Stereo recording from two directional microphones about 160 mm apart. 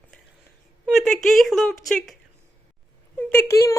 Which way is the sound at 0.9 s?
Centre (ahead or behind).